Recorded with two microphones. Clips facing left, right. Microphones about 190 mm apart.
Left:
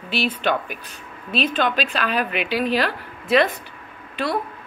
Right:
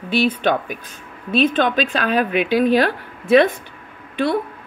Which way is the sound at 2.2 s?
50° right (ahead or behind).